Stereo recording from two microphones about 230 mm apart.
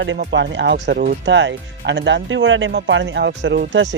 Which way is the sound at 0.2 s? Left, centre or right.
Right.